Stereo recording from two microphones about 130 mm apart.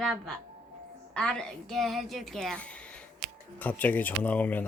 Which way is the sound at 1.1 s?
5° left (ahead or behind).